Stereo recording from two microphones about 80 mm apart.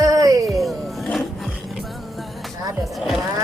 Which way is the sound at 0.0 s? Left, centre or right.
Right.